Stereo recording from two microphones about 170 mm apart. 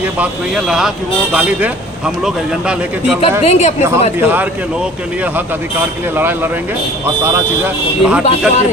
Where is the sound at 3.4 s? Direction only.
40° left (ahead or behind).